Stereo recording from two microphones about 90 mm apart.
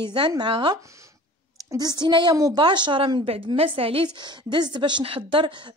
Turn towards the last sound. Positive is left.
turn(degrees=-65)  # may be behind; listen again after turning